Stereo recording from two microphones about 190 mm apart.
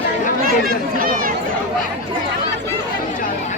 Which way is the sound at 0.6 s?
50° right (ahead or behind).